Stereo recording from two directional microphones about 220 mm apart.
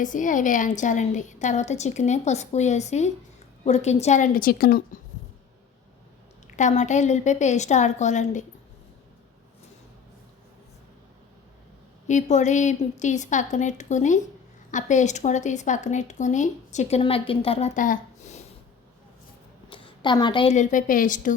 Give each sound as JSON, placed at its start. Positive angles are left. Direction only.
{"t": 0.0, "sound": "speech", "side_deg": 35}
{"t": 6.6, "sound": "speech", "side_deg": 35}
{"t": 12.0, "sound": "speech", "side_deg": 35}
{"t": 19.7, "sound": "a woman's voice", "side_deg": 20}